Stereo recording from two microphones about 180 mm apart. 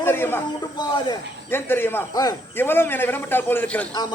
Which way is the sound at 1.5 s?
10° left (ahead or behind).